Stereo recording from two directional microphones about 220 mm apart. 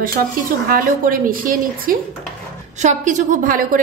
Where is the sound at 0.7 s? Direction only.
40° right (ahead or behind).